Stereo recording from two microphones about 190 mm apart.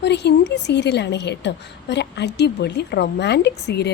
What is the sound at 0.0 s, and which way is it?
A woman's voice, 65° left (ahead or behind).